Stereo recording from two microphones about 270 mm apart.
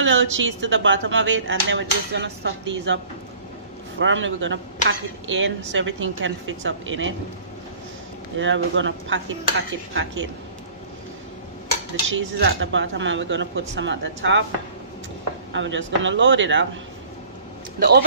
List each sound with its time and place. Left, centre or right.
0.0 s speech: right
4.0 s speech: right
8.4 s speech: right
12.1 s speech: right
15.5 s speech: right
17.7 s a man's voice: right